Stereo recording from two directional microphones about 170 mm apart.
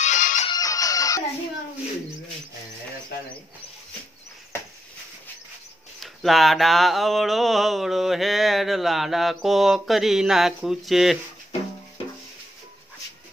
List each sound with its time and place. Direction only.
0.0 s music: 50° left (ahead or behind)
0.5 s music: 20° left (ahead or behind)
5.9 s mantra: centre (ahead or behind)